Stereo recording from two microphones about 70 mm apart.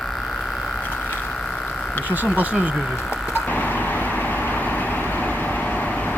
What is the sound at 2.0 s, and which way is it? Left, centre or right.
Speech, right.